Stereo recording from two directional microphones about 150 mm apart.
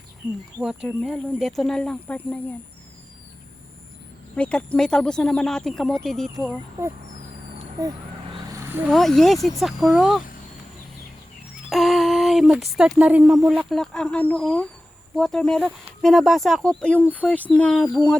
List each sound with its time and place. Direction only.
0.6 s speech: centre (ahead or behind)
4.4 s speech: 5° left (ahead or behind)
6.8 s speech: 15° right (ahead or behind)
8.5 s a sound: 15° right (ahead or behind)
8.9 s speech: centre (ahead or behind)
11.7 s speech: centre (ahead or behind)